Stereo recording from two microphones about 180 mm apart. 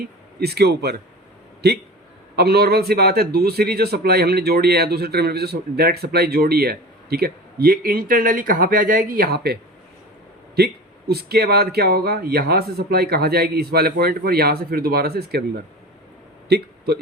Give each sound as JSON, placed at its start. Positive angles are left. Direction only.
{"t": 0.3, "sound": "a man's voice", "side_deg": -65}
{"t": 11.1, "sound": "a man's voice", "side_deg": -60}
{"t": 16.5, "sound": "a sound", "side_deg": -65}